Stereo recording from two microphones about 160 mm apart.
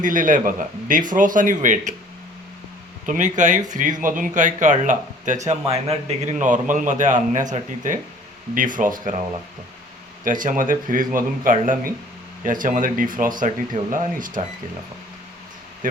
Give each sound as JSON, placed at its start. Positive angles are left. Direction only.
{"t": 0.0, "sound": "speech", "side_deg": -55}
{"t": 3.1, "sound": "speech", "side_deg": -50}
{"t": 10.2, "sound": "speech", "side_deg": -55}